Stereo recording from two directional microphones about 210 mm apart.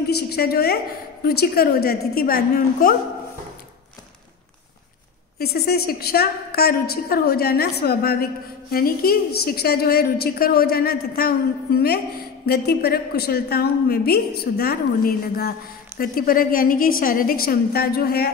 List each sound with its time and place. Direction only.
0.1 s a woman's voice: 50° left (ahead or behind)
5.4 s a woman's voice: 50° left (ahead or behind)